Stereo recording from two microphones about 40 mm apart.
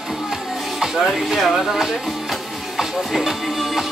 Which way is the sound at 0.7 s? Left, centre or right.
Centre.